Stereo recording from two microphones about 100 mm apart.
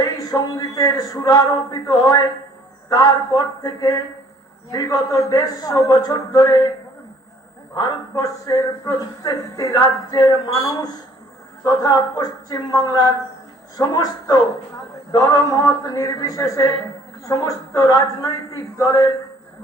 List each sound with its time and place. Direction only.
0.0 s a man's voice: 40° left (ahead or behind)
5.9 s speech: 45° left (ahead or behind)
7.8 s a man's voice: 40° left (ahead or behind)